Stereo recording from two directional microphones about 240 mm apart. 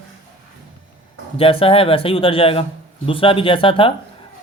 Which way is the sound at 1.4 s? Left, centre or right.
Left.